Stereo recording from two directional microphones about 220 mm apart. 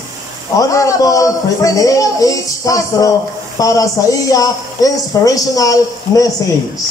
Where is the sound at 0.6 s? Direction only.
15° left (ahead or behind).